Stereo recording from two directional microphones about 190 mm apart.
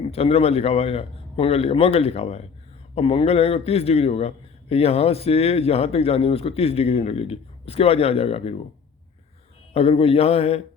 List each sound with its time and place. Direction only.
0.0 s a man's voice: 30° left (ahead or behind)
9.7 s a man's voice: 30° left (ahead or behind)